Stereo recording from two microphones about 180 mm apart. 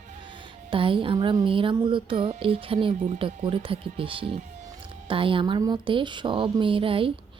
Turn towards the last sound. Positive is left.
turn(degrees=-30)  # may be behind; listen again after turning